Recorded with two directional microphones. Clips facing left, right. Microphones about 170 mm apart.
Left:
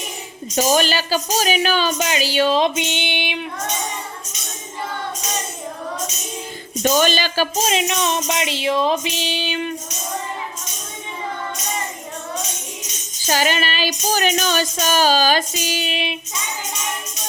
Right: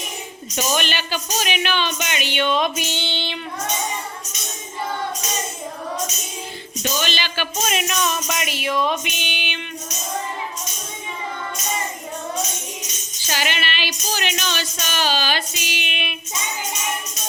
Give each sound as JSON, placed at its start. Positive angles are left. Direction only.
{"t": 0.5, "sound": "music", "side_deg": 40}
{"t": 6.8, "sound": "speech", "side_deg": 45}
{"t": 13.2, "sound": "music", "side_deg": 40}